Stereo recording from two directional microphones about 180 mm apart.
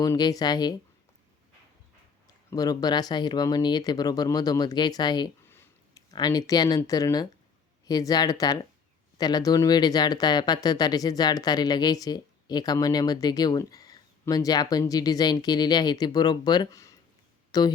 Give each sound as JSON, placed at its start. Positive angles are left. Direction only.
{"t": 0.0, "sound": "speech", "side_deg": 20}
{"t": 2.5, "sound": "speech", "side_deg": 20}